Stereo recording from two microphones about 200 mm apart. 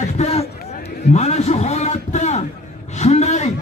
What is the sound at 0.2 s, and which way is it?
Speech, 30° left (ahead or behind).